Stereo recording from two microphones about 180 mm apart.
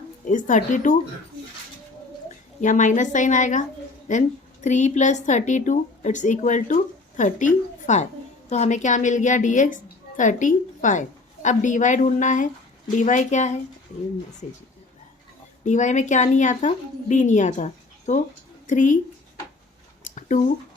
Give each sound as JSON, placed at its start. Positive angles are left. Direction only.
{"t": 0.3, "sound": "a woman's voice", "side_deg": 45}
{"t": 2.6, "sound": "a woman's voice", "side_deg": 45}
{"t": 15.6, "sound": "a woman's voice", "side_deg": 40}
{"t": 20.1, "sound": "a sound", "side_deg": 45}